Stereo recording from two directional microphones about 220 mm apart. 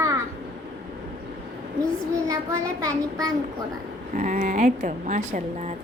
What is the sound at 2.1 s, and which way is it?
Child singing, 15° right (ahead or behind).